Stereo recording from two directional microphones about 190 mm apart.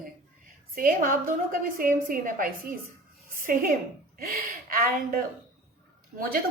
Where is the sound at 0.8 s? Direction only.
50° right (ahead or behind).